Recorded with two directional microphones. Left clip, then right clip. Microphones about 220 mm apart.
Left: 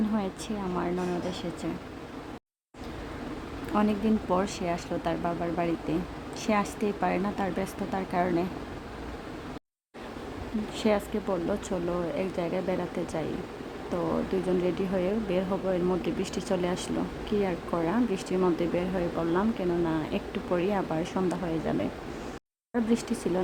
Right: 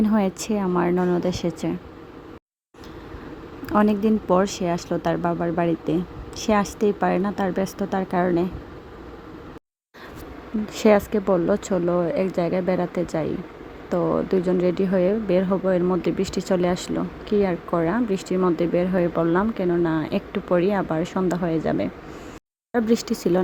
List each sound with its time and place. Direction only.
0.1 s a woman's voice: 30° right (ahead or behind)
3.7 s speech: 25° right (ahead or behind)
10.8 s speech: 30° right (ahead or behind)
14.6 s speech: 20° right (ahead or behind)